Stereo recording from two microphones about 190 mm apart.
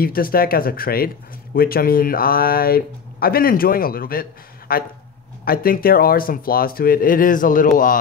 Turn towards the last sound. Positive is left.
turn(degrees=45)  # may be behind; listen again after turning